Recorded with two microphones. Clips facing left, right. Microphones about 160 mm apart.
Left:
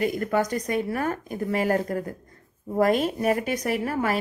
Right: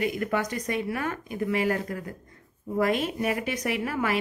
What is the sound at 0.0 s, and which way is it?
A woman's voice, 40° left (ahead or behind).